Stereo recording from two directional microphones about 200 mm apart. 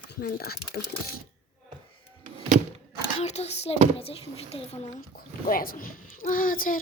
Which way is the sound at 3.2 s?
35° left (ahead or behind).